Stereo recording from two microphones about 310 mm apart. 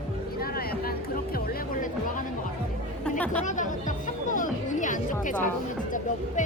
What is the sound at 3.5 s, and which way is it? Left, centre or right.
Speech, left.